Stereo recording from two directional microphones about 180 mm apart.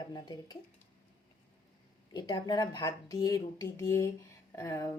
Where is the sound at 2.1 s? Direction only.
25° left (ahead or behind).